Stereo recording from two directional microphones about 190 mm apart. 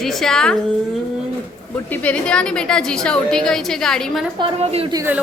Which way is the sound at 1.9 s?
5° left (ahead or behind).